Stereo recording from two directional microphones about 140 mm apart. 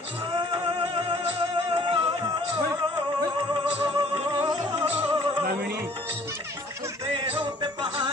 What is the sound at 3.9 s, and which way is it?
Music, 25° right (ahead or behind).